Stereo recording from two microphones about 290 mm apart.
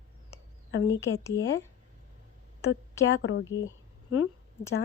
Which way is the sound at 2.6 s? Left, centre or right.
Left.